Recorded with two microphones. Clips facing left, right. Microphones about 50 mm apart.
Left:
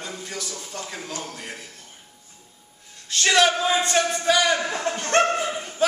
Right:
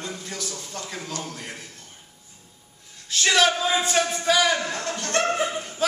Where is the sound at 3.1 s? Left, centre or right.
Centre.